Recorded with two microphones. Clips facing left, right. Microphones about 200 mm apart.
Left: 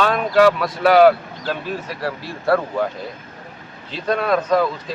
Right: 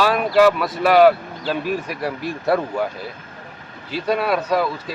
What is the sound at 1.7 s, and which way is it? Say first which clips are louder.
Speech: right 2 dB; 15° right (ahead or behind).